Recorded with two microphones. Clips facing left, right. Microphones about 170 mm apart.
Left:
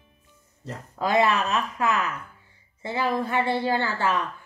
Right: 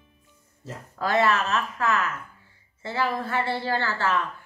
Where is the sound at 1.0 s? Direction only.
15° left (ahead or behind).